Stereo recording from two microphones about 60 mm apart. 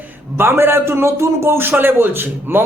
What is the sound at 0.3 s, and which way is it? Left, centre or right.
A man's voice, right.